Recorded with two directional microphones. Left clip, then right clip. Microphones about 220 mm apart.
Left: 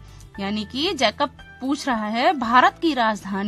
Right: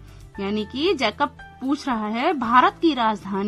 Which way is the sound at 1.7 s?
35° left (ahead or behind).